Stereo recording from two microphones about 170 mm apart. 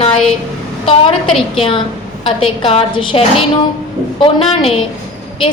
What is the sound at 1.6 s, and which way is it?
A woman's voice, 30° left (ahead or behind).